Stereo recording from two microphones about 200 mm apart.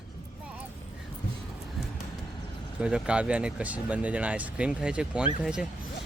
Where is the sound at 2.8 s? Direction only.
5° right (ahead or behind).